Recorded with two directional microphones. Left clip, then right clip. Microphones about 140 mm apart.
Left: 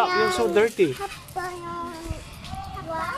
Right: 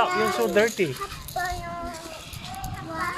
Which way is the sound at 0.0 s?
40° left (ahead or behind).